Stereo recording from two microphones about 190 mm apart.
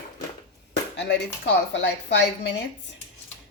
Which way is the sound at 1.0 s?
65° left (ahead or behind).